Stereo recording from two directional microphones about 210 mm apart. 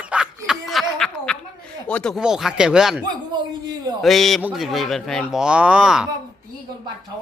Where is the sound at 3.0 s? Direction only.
20° right (ahead or behind).